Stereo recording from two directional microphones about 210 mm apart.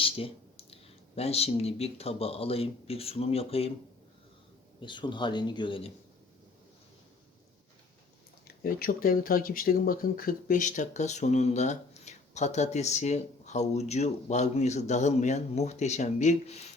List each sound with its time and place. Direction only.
0.0 s speech: 25° left (ahead or behind)
4.8 s speech: 20° left (ahead or behind)
8.4 s speech: 45° left (ahead or behind)